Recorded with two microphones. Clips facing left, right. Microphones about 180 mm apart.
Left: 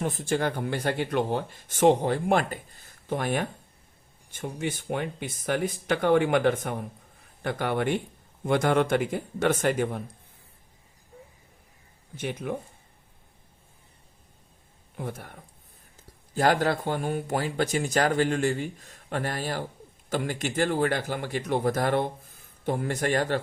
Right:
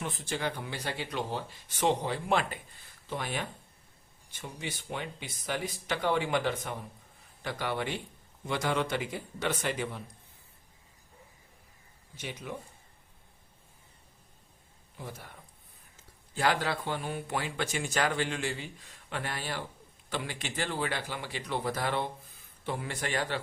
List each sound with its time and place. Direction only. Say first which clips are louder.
0.0 s speech: left 7 dB; 45° left (ahead or behind)
12.1 s speech: left 9 dB; 50° left (ahead or behind)
14.9 s speech: left 8 dB; 55° left (ahead or behind)